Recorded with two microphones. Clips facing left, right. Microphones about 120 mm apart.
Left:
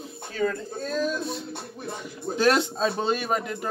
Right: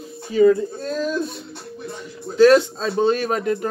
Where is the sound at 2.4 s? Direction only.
20° left (ahead or behind).